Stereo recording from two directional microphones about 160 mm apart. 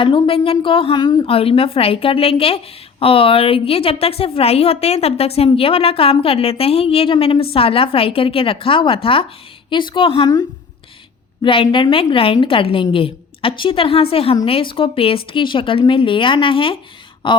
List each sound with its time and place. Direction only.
0.0 s a woman's voice: 35° left (ahead or behind)
11.4 s a woman's voice: 35° left (ahead or behind)